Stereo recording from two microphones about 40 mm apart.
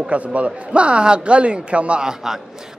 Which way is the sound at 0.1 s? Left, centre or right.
Right.